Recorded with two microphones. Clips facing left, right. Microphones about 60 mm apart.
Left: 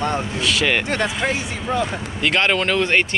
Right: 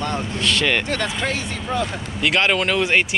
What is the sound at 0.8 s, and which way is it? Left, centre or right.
Speech, left.